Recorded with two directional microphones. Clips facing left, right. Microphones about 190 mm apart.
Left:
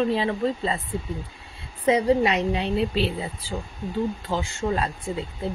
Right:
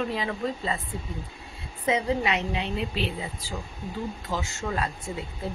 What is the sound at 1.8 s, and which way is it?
A woman's voice, 35° left (ahead or behind).